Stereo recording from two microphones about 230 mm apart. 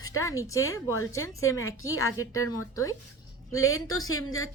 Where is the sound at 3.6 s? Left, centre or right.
Left.